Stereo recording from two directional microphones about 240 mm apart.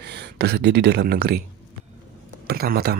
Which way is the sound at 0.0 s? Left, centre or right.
Right.